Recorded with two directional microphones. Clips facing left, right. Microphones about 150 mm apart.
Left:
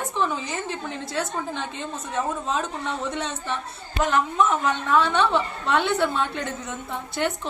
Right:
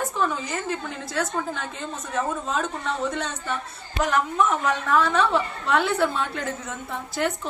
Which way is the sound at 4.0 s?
Centre (ahead or behind).